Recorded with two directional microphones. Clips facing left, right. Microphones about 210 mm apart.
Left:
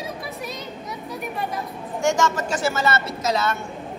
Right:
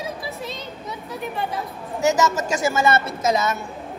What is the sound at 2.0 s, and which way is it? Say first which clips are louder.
A woman's voice: right 2 dB; 5° right (ahead or behind).